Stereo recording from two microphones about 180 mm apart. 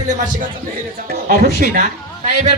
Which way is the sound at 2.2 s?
35° right (ahead or behind).